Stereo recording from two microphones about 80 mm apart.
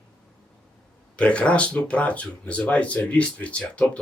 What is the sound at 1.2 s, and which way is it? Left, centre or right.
Speech, centre.